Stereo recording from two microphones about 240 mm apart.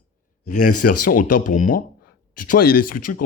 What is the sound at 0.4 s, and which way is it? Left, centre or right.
Speech, left.